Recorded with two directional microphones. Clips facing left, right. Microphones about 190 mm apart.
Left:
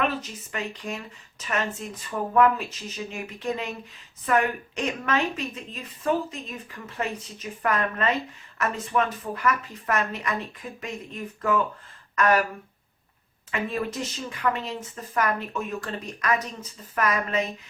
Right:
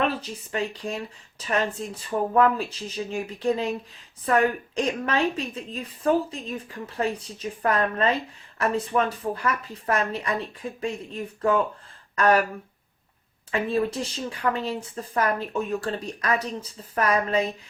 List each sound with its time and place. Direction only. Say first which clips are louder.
0.2 s speech: right 4 dB; 30° right (ahead or behind)
13.5 s speech: right 4 dB; 30° right (ahead or behind)